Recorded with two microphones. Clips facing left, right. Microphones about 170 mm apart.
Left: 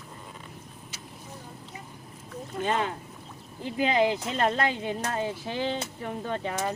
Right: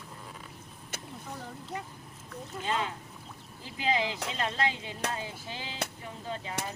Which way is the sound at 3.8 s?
55° left (ahead or behind).